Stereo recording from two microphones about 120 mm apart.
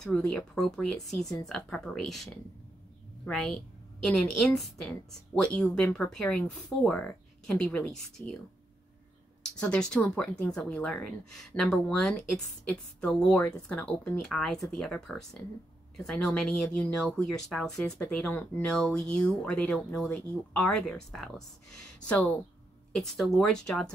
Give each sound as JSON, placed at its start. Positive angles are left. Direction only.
{"t": 0.0, "sound": "a woman's voice", "side_deg": 5}
{"t": 9.6, "sound": "a woman's voice", "side_deg": 5}
{"t": 15.4, "sound": "speech", "side_deg": 20}
{"t": 16.0, "sound": "a woman's voice", "side_deg": 5}